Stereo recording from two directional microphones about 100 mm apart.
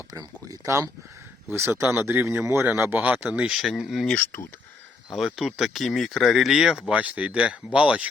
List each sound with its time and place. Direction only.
0.1 s speech: 35° right (ahead or behind); by 4.1 s 5° right (ahead or behind)
4.1 s speech: 20° left (ahead or behind)
5.1 s speech: centre (ahead or behind)